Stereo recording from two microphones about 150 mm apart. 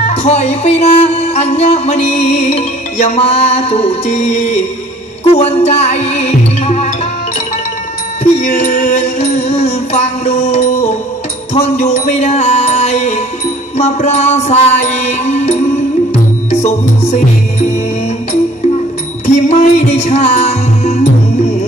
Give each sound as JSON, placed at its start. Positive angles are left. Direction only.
{"t": 0.0, "sound": "music", "side_deg": 45}
{"t": 8.2, "sound": "music", "side_deg": 50}
{"t": 19.2, "sound": "music", "side_deg": 50}